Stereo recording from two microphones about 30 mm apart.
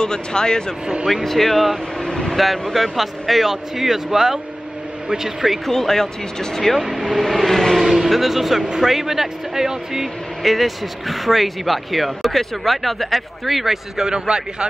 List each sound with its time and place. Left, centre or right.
0.0 s speech: left
1.2 s speech: centre
2.0 s vehicle: left
2.3 s speech: centre
5.7 s speech: centre
6.8 s speech: centre
7.1 s speech: centre
7.8 s speech: centre
10.4 s speech: centre
13.9 s a man's voice: right